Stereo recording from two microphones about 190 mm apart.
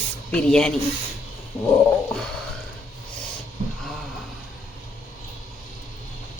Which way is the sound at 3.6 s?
45° right (ahead or behind).